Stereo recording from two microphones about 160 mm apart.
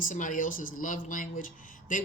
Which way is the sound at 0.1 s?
55° left (ahead or behind).